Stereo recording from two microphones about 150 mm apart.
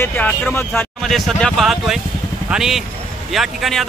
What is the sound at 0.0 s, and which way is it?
Speech, 10° left (ahead or behind).